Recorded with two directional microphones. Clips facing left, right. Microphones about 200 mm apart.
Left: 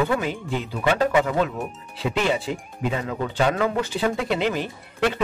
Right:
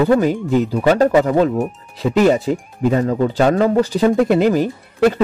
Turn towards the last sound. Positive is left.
turn(degrees=-40)  # may be behind; listen again after turning